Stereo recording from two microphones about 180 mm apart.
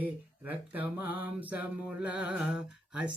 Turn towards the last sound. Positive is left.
turn(degrees=-5)  # may be behind; listen again after turning